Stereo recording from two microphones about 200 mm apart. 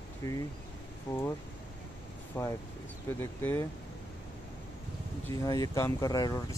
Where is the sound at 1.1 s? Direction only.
10° left (ahead or behind).